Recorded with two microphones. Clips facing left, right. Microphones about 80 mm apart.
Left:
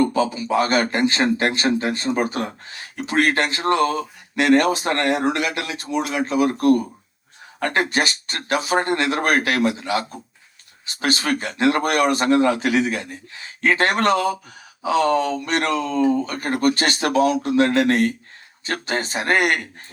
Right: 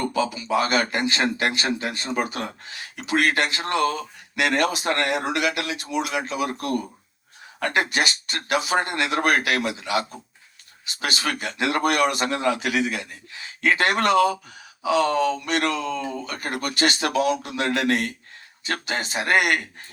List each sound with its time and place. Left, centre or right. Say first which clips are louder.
0.1 s speech: left 3 dB; left